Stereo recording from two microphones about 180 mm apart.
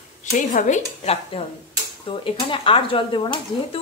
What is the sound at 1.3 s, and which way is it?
Speech, 35° left (ahead or behind).